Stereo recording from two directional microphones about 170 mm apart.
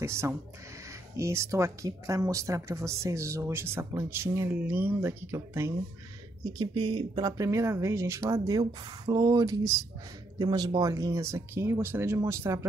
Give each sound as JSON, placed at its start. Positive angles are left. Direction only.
{"t": 0.0, "sound": "speech", "side_deg": -15}
{"t": 6.6, "sound": "speech", "side_deg": -30}